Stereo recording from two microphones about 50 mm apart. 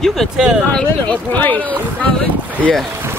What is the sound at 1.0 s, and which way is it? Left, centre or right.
Speech, left.